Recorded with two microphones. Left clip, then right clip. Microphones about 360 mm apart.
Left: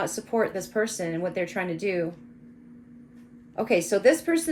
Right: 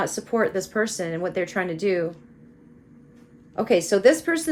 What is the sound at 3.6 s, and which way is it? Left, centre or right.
Speech, right.